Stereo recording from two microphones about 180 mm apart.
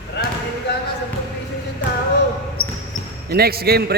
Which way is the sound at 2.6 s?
55° left (ahead or behind).